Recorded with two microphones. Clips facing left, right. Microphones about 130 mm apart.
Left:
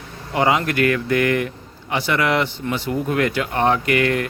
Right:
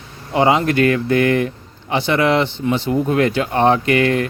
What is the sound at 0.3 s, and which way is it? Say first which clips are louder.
Speech: right 4 dB; 25° right (ahead or behind).